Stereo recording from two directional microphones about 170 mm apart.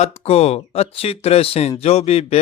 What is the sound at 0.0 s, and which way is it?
Speech, 35° left (ahead or behind).